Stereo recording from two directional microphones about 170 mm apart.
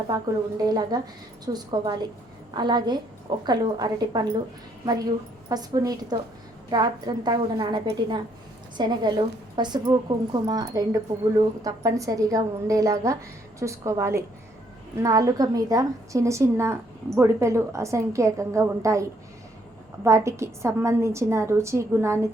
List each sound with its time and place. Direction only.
0.1 s a woman's voice: 20° right (ahead or behind)
5.5 s a woman's voice: 20° right (ahead or behind)
8.8 s a woman's voice: 25° right (ahead or behind)
20.1 s a woman's voice: 15° right (ahead or behind)